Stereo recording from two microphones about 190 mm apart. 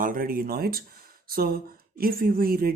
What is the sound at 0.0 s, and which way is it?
Speech, 50° right (ahead or behind).